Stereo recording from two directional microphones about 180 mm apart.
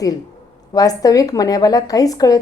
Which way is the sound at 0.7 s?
20° left (ahead or behind).